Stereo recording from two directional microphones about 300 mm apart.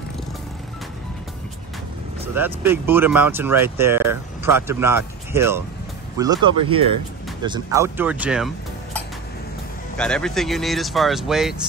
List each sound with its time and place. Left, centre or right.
2.3 s speech: centre